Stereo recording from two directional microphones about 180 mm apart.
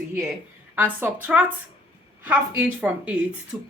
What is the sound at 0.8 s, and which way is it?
Speech, 10° right (ahead or behind).